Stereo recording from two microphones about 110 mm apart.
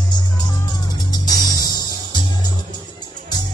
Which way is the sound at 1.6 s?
40° left (ahead or behind).